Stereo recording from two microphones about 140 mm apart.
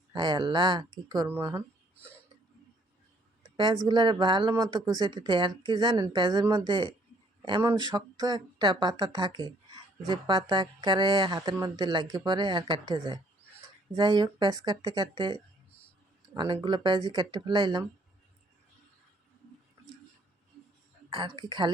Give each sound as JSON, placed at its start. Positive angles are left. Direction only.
{"t": 0.1, "sound": "speech", "side_deg": -30}
{"t": 3.8, "sound": "speech", "side_deg": -30}
{"t": 21.1, "sound": "speech", "side_deg": -35}